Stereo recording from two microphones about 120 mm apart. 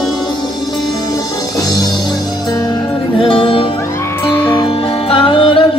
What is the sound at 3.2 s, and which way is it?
Music, 50° left (ahead or behind).